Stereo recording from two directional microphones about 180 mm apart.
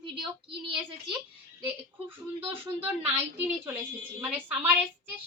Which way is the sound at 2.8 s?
10° right (ahead or behind).